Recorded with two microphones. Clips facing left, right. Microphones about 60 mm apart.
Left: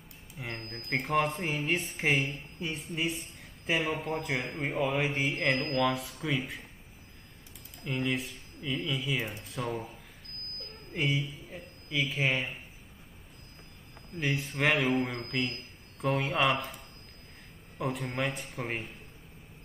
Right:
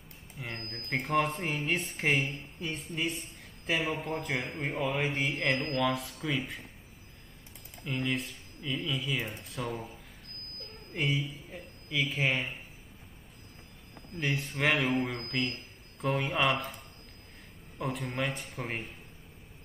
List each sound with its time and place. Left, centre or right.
0.6 s speech: centre
0.8 s speech: centre
7.8 s speech: centre
11.0 s speech: centre
14.2 s speech: centre
17.7 s speech: centre